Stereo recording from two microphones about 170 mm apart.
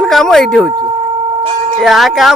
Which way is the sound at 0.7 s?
30° right (ahead or behind).